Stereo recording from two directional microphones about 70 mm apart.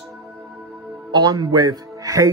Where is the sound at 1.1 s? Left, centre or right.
Right.